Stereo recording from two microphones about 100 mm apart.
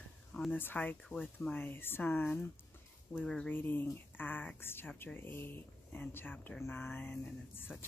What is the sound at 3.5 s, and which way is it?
Speech, 20° left (ahead or behind).